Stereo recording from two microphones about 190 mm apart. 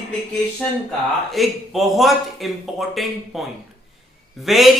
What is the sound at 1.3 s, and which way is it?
Speech, centre (ahead or behind).